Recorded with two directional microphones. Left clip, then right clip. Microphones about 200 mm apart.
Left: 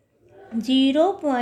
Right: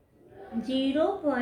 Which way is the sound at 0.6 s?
45° left (ahead or behind).